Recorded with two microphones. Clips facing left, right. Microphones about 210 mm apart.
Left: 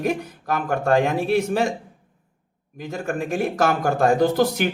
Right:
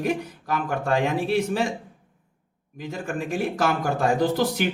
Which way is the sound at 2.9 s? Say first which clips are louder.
Left 3 dB; 45° left (ahead or behind).